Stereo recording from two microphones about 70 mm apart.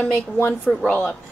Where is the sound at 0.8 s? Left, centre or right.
Left.